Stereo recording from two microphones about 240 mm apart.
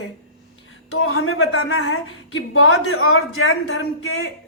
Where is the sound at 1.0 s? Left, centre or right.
Left.